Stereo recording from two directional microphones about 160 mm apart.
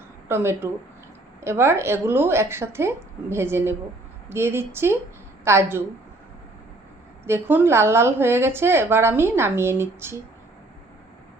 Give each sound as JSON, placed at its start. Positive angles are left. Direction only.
{"t": 0.3, "sound": "a woman's voice", "side_deg": -15}
{"t": 7.3, "sound": "a woman's voice", "side_deg": -15}